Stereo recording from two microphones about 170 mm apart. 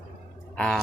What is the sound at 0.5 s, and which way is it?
Speech, 5° left (ahead or behind).